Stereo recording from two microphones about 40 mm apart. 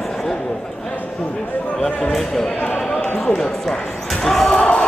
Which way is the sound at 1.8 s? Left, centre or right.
Centre.